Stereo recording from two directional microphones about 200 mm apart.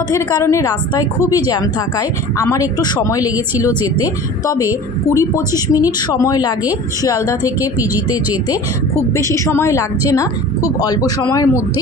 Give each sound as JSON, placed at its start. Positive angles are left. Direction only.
{"t": 0.1, "sound": "a woman's voice", "side_deg": 15}